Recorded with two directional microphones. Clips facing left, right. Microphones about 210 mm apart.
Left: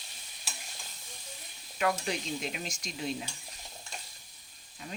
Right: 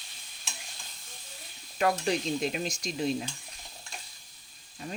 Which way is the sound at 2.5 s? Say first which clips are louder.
Right 6 dB; 35° right (ahead or behind).